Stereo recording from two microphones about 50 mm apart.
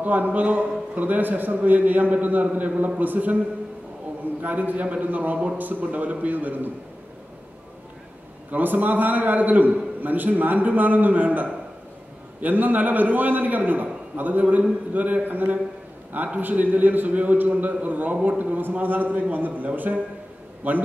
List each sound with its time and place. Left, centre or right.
0.0 s a man's voice: right
4.4 s a man's voice: right
8.5 s a man's voice: right